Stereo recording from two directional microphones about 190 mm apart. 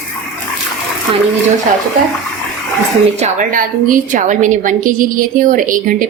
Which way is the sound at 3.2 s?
45° right (ahead or behind).